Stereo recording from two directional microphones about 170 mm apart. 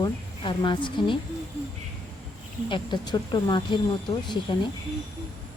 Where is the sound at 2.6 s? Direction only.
30° left (ahead or behind).